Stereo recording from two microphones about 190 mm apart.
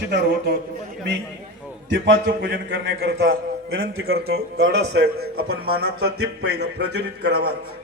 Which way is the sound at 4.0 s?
75° right (ahead or behind).